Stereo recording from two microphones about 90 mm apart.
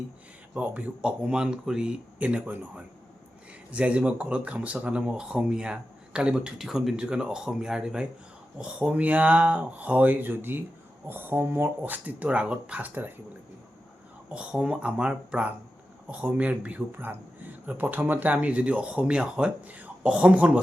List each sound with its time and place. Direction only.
0.5 s speech: 15° right (ahead or behind)
14.3 s speech: 10° right (ahead or behind)